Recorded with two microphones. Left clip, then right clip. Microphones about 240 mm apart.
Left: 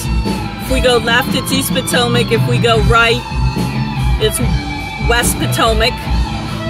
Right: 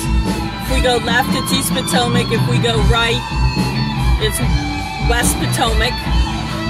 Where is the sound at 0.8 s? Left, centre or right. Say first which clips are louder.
Left 3 dB; left.